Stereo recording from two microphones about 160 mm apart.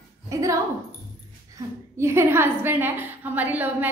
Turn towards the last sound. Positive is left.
turn(degrees=-10)  # may be behind; listen again after turning